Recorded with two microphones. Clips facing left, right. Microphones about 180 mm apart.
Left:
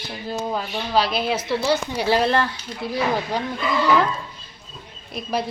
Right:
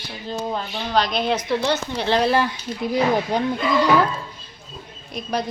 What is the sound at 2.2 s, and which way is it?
Speech, 10° right (ahead or behind).